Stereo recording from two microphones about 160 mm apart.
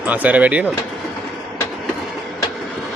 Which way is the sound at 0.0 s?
10° right (ahead or behind).